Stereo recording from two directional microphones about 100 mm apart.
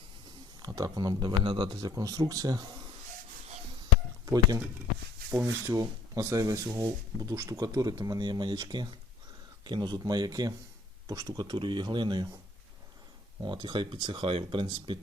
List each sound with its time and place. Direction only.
0.6 s speech: 40° right (ahead or behind)
5.3 s speech: 25° right (ahead or behind)
5.7 s speech: 35° right (ahead or behind)
13.4 s speech: 50° right (ahead or behind)